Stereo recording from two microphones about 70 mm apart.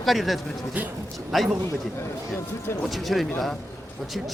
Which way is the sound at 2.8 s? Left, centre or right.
Centre.